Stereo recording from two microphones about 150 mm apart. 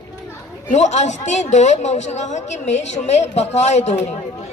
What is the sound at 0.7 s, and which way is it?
A woman's voice, 50° left (ahead or behind).